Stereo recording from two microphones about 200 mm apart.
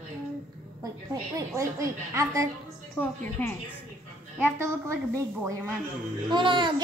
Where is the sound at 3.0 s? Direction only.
10° left (ahead or behind).